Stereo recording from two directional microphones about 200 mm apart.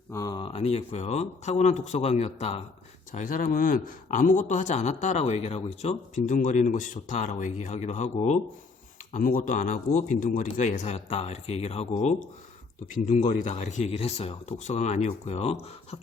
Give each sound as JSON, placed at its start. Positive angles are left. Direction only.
{"t": 0.1, "sound": "speech", "side_deg": 15}
{"t": 3.1, "sound": "speech", "side_deg": 40}